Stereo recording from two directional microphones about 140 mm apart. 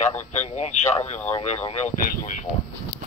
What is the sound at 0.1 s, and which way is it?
Speech, 55° left (ahead or behind).